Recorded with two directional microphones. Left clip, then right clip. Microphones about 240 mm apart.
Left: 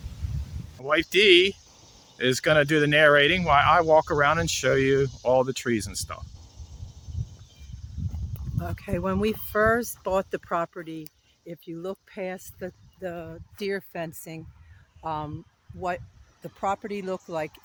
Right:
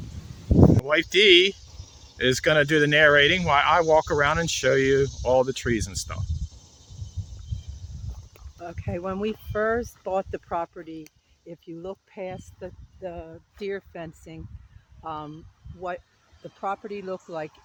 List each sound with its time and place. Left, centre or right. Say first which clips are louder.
0.9 s speech: left 2 dB; centre
8.5 s speech: left 2 dB; left
16.6 s speech: left 2 dB; left